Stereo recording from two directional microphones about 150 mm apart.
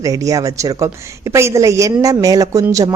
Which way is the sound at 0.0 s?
20° right (ahead or behind).